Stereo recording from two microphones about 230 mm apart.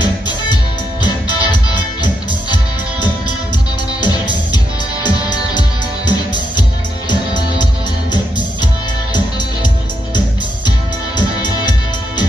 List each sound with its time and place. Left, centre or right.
1.0 s music: centre
4.0 s music: centre